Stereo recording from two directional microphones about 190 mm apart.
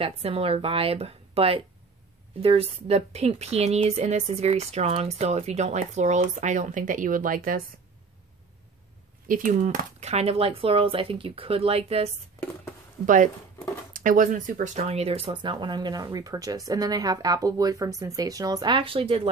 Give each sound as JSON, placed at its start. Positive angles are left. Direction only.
{"t": 0.0, "sound": "a woman's voice", "side_deg": -30}
{"t": 9.3, "sound": "a woman's voice", "side_deg": -45}
{"t": 13.0, "sound": "speech", "side_deg": -40}